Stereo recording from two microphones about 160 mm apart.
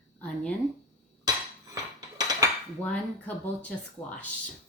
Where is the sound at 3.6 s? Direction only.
10° left (ahead or behind).